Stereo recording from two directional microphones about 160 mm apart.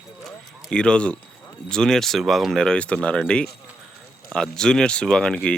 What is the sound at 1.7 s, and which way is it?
Speech, 5° left (ahead or behind).